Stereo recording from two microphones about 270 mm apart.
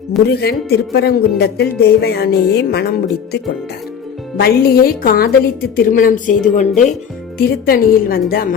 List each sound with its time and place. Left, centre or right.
0.3 s speech: left
4.4 s speech: left